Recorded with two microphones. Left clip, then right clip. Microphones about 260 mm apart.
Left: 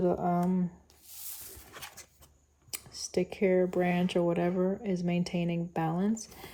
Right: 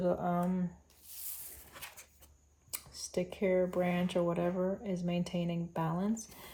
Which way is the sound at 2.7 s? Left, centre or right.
Left.